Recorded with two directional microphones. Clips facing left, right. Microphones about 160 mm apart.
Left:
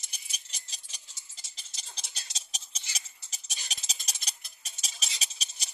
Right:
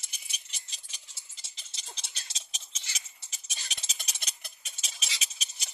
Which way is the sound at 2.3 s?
35° left (ahead or behind).